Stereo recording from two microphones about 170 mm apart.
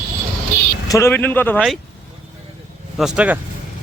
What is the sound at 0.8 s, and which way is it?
Speech, 20° left (ahead or behind).